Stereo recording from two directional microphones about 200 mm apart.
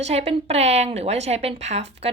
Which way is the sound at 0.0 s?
30° right (ahead or behind).